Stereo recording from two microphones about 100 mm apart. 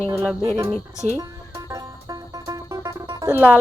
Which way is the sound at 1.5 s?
35° right (ahead or behind).